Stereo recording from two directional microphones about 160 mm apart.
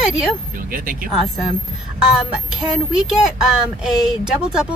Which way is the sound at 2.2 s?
5° right (ahead or behind).